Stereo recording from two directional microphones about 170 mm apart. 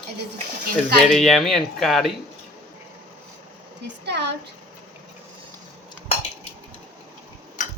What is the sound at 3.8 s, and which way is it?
Speech, 80° right.